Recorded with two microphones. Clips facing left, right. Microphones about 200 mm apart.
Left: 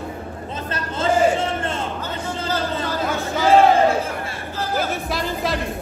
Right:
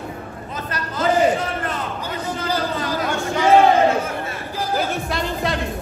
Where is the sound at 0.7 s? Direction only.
25° left (ahead or behind).